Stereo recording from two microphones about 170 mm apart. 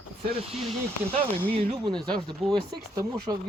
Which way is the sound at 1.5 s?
35° right (ahead or behind).